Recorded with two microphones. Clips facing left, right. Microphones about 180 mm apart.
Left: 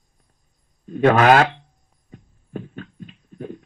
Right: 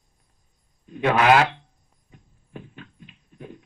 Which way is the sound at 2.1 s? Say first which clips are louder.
Left 9 dB; 45° left (ahead or behind).